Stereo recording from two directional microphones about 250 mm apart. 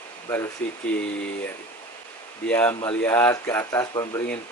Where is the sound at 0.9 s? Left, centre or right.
Centre.